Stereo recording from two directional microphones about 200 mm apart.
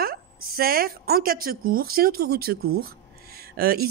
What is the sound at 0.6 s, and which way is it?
Speech, 50° right (ahead or behind).